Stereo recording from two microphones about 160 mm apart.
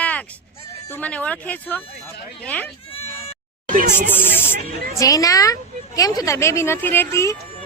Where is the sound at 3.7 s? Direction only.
50° right (ahead or behind).